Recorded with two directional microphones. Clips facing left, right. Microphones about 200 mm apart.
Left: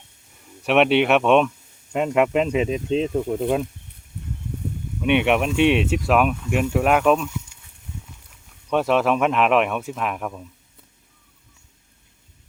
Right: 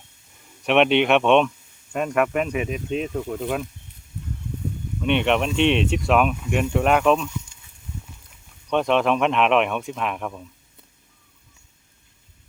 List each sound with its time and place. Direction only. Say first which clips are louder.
0.6 s speech: left 1 dB; 5° left (ahead or behind)
1.9 s speech: left 3 dB; 20° left (ahead or behind)
4.9 s speech: left 2 dB; 10° left (ahead or behind)
8.7 s speech: left 1 dB; 5° left (ahead or behind)